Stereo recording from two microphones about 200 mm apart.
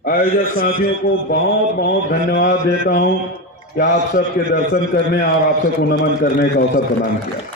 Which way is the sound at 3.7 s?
60° left (ahead or behind).